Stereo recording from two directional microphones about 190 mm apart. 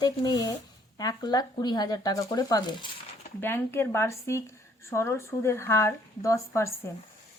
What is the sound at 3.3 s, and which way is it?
Speech, 10° left (ahead or behind).